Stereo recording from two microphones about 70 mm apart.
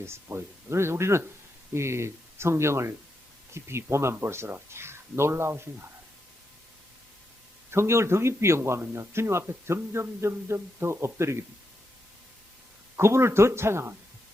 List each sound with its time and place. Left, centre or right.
0.0 s a man's voice: right
7.7 s a man's voice: right
13.0 s a man's voice: right